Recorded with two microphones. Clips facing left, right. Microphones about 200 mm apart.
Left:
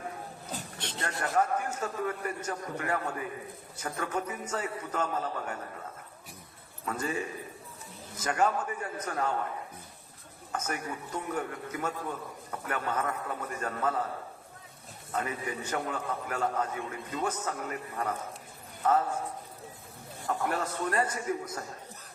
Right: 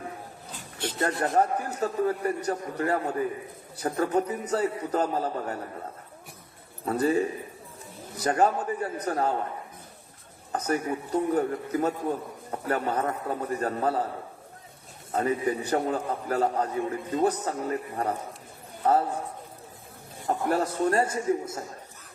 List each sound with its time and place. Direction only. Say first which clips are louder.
1.2 s a man's voice: right 2 dB; 35° right (ahead or behind)
6.8 s a man's voice: right 9 dB; 35° right (ahead or behind)
10.5 s a man's voice: right 8 dB; 35° right (ahead or behind)
15.1 s a man's voice: right 8 dB; 35° right (ahead or behind)
20.5 s speech: right 7 dB; 35° right (ahead or behind)